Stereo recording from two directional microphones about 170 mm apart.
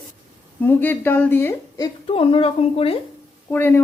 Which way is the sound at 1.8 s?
30° left (ahead or behind).